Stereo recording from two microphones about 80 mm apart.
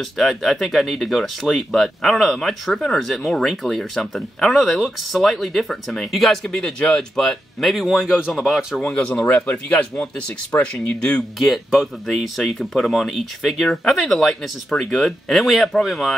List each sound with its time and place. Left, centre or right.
0.2 s speech: centre
8.7 s speech: centre
11.3 s speech: centre